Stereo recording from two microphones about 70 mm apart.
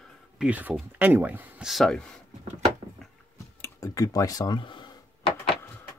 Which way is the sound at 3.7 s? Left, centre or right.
Left.